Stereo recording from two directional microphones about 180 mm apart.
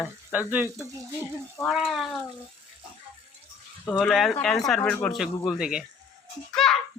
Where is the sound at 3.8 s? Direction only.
5° left (ahead or behind).